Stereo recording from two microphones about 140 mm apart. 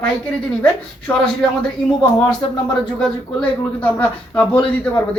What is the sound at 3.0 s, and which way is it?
A man's voice, 10° left (ahead or behind).